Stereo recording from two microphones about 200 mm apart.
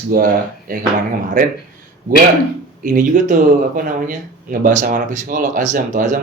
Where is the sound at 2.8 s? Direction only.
40° right (ahead or behind).